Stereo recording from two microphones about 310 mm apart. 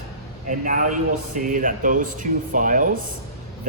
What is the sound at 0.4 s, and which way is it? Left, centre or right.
Speech, right.